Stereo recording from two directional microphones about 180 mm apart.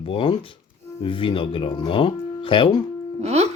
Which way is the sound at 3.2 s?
35° right (ahead or behind).